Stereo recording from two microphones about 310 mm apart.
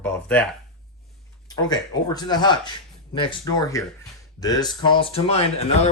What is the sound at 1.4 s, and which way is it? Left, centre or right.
Speech, centre.